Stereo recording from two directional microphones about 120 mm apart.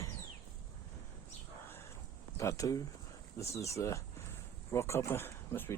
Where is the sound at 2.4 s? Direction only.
30° left (ahead or behind).